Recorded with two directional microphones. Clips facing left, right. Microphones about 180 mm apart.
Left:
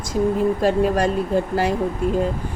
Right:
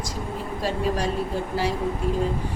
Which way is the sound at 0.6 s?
50° left (ahead or behind).